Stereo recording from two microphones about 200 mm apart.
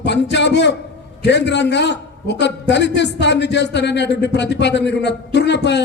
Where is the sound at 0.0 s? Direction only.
60° left (ahead or behind).